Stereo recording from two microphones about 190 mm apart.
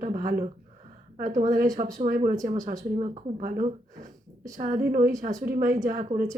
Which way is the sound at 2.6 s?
45° right (ahead or behind).